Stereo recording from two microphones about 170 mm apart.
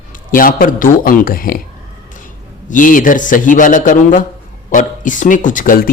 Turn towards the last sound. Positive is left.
turn(degrees=55)  # may be behind; listen again after turning